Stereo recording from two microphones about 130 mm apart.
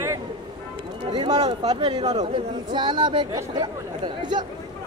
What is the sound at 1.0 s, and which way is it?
Speech, 35° right (ahead or behind).